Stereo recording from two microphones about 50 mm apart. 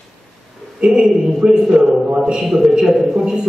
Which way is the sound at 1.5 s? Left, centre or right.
Centre.